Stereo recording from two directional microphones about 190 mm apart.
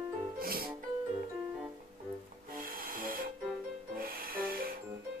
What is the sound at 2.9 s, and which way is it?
Music, 50° right (ahead or behind).